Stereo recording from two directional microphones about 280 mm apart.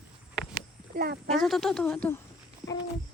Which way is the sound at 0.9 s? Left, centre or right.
Right.